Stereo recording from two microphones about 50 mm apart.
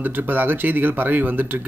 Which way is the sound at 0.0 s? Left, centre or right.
Right.